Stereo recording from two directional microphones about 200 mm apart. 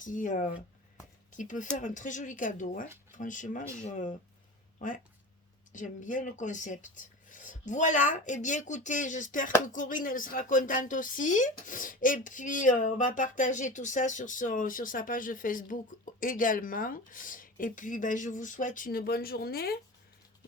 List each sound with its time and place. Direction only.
0.0 s speech: 40° left (ahead or behind)
5.7 s speech: 40° left (ahead or behind)